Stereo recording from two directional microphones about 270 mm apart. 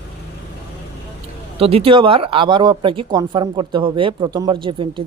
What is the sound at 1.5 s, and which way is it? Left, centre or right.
Speech, right.